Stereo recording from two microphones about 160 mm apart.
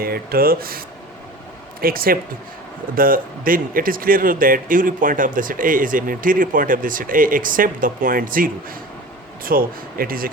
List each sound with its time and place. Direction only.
0.0 s speech: 70° right (ahead or behind)
1.8 s speech: 65° right (ahead or behind)